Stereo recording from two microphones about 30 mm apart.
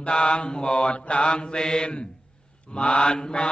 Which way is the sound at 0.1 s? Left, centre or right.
Left.